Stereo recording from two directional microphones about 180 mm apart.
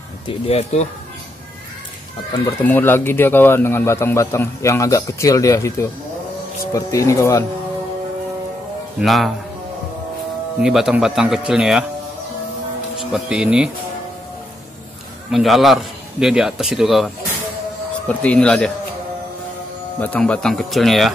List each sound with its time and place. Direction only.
0.3 s speech: 35° left (ahead or behind)
2.6 s a man's voice: 10° left (ahead or behind)
9.0 s a man's voice: centre (ahead or behind)
10.6 s a man's voice: 5° right (ahead or behind)
13.1 s a man's voice: 5° right (ahead or behind)
15.3 s a man's voice: centre (ahead or behind)
20.0 s a man's voice: 5° left (ahead or behind)